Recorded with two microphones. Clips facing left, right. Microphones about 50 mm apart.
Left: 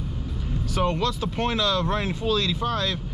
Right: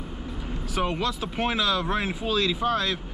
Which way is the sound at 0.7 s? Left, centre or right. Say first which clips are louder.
Left 2 dB; centre.